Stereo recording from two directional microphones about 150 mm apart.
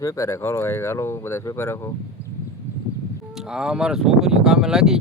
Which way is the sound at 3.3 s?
5° right (ahead or behind).